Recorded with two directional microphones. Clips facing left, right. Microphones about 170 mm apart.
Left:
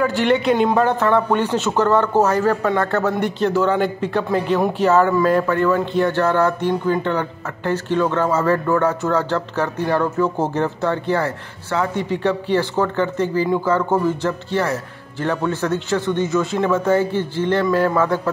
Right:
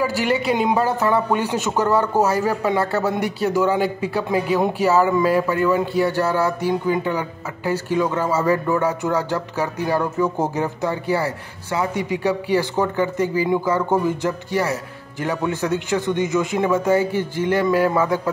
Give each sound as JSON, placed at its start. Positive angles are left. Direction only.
{"t": 0.0, "sound": "a man's voice", "side_deg": -5}